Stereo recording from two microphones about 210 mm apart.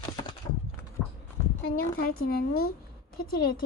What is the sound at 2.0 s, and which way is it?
A woman's voice, 45° left (ahead or behind).